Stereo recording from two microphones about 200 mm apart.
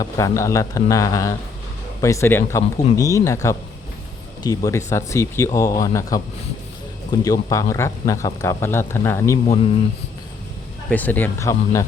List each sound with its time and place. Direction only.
0.0 s speech: 15° left (ahead or behind)
10.8 s speech: 10° left (ahead or behind)